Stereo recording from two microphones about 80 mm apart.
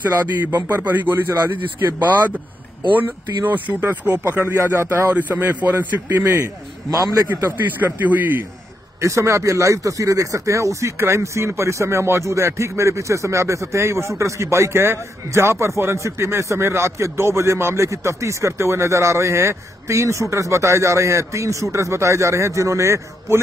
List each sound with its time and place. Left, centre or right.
0.0 s speech: right
3.8 s speech: right
6.9 s a man's voice: right
7.3 s speech: right
9.0 s speech: right